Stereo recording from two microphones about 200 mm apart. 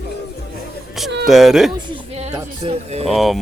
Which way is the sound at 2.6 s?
30° right (ahead or behind).